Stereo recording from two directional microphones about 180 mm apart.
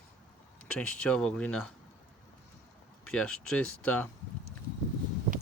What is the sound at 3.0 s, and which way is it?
Speech, 5° left (ahead or behind).